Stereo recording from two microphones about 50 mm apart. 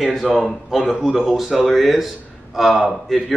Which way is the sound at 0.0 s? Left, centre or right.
Centre.